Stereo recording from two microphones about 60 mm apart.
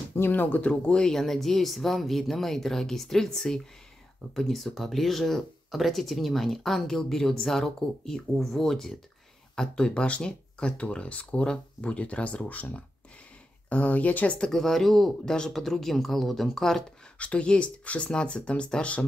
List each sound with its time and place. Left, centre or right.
0.1 s speech: left
13.7 s speech: left
14.4 s speech: centre
17.2 s speech: centre